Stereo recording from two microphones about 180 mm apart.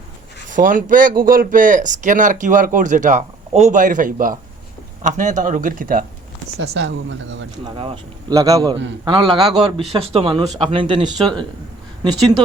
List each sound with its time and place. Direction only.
0.5 s speech: 50° right (ahead or behind)
6.6 s speech: 90° right
7.6 s speech: 25° right (ahead or behind)